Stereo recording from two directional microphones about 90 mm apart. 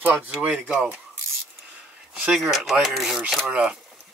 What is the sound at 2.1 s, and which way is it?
Speech, 10° right (ahead or behind).